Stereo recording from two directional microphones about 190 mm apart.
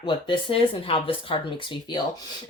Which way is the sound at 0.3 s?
30° left (ahead or behind).